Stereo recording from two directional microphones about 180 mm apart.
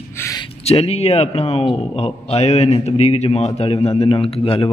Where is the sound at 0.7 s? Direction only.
35° left (ahead or behind).